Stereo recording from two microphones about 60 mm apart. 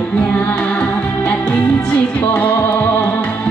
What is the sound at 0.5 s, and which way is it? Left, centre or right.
Music, left.